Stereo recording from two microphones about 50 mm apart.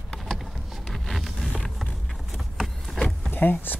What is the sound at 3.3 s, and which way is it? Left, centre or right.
Speech, left.